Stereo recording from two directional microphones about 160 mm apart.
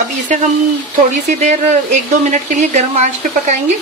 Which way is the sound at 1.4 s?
45° right (ahead or behind).